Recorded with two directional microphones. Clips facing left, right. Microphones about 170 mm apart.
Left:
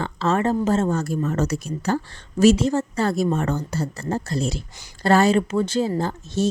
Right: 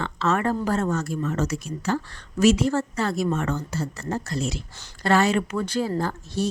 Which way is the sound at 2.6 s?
20° left (ahead or behind).